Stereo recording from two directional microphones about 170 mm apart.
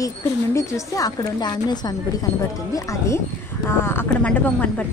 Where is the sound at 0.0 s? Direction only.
15° left (ahead or behind).